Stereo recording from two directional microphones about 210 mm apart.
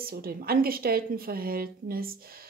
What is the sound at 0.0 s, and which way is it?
Speech, 45° right (ahead or behind).